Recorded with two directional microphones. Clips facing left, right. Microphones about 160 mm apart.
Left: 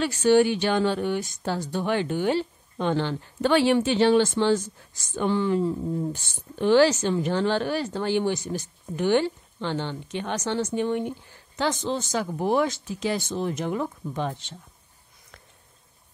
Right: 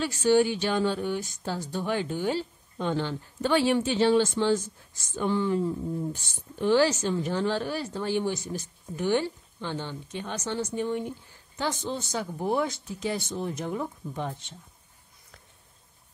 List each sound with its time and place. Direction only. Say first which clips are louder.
0.0 s speech: left 3 dB; 70° left (ahead or behind); by 5.7 s 85° left
6.1 s speech: left 3 dB; 75° left (ahead or behind)